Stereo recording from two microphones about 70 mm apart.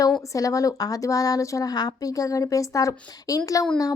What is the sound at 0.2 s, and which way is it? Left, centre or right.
A woman's voice, left.